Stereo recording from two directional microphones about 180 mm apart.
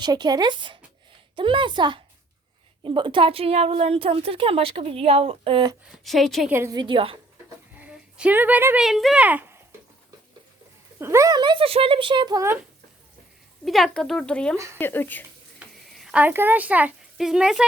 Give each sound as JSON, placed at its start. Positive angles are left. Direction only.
{"t": 0.0, "sound": "a woman's voice", "side_deg": -25}
{"t": 5.9, "sound": "speech", "side_deg": 0}
{"t": 6.5, "sound": "speech", "side_deg": -15}
{"t": 7.8, "sound": "speech", "side_deg": -5}
{"t": 11.0, "sound": "speech", "side_deg": -15}
{"t": 13.7, "sound": "speech", "side_deg": 0}
{"t": 15.5, "sound": "speech", "side_deg": -5}